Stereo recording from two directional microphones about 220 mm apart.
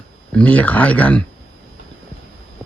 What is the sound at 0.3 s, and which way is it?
Speech, 5° left (ahead or behind).